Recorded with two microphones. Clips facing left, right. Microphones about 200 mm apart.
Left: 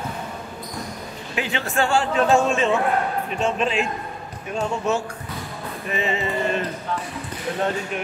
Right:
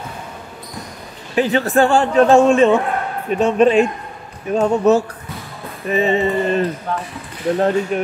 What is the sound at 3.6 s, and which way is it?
Speech, 50° right (ahead or behind).